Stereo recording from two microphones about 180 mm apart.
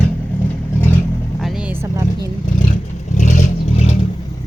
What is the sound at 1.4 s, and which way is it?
Speech, 5° right (ahead or behind).